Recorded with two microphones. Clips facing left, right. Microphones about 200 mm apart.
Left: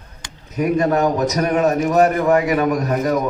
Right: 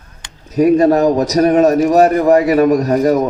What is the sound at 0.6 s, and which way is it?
A man's voice, 35° right (ahead or behind).